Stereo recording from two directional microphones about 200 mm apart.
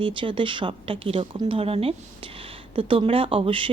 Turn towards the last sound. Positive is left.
turn(degrees=-25)  # may be behind; listen again after turning